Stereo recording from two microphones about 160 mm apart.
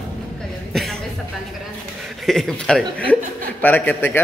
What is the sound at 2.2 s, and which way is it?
A man's voice, centre (ahead or behind).